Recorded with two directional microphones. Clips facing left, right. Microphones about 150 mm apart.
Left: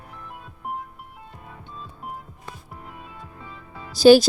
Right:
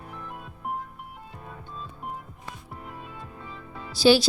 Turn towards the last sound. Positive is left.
turn(degrees=45)  # may be behind; listen again after turning